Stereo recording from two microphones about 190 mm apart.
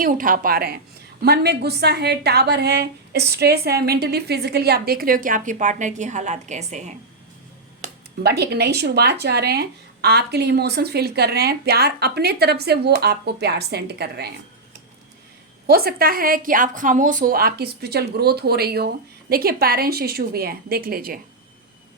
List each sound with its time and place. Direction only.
0.0 s a woman's voice: 45° right (ahead or behind)
7.8 s speech: 55° right (ahead or behind)
15.6 s a woman's voice: 55° right (ahead or behind)